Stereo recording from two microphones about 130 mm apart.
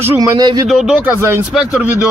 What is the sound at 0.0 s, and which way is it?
Speech, 30° right (ahead or behind).